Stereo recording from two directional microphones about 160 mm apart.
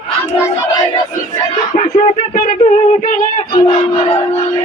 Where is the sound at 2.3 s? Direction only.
60° left (ahead or behind).